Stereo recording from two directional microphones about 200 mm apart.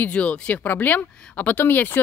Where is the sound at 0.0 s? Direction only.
5° left (ahead or behind).